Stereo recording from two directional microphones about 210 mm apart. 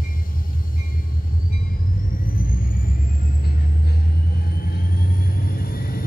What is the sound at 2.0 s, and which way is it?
Vehicle, 40° left (ahead or behind).